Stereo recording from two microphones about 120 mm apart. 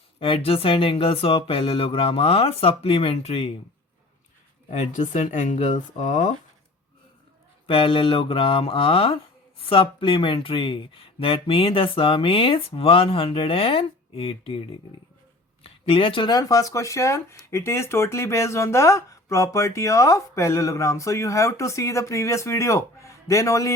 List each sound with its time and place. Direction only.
0.2 s speech: 50° left (ahead or behind)
4.7 s speech: 80° left
7.7 s speech: 45° left (ahead or behind)
15.6 s speech: 50° left (ahead or behind)
16.3 s speech: 30° left (ahead or behind)